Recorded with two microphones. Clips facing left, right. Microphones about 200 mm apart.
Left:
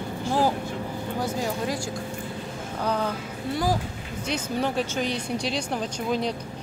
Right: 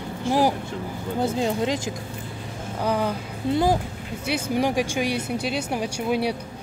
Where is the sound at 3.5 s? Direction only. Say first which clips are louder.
Right 5 dB; 25° right (ahead or behind).